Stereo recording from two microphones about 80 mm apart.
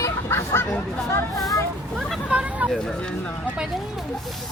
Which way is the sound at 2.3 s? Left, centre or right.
Centre.